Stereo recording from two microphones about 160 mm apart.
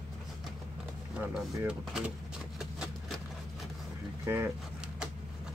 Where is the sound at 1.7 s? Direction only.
5° right (ahead or behind).